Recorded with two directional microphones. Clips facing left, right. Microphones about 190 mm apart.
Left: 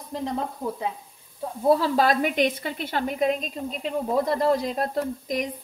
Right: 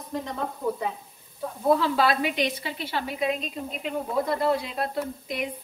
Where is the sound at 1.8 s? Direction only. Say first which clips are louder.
Left 2 dB; 45° left (ahead or behind).